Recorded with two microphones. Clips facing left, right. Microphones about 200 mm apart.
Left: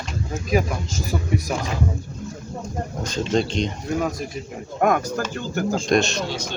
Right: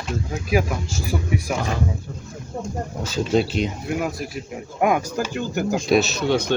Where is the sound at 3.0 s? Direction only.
5° right (ahead or behind).